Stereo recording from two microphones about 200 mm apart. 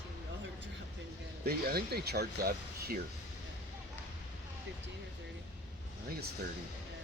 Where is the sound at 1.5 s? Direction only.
50° right (ahead or behind).